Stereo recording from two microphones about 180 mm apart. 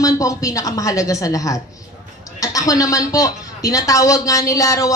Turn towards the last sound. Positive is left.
turn(degrees=20)  # may be behind; listen again after turning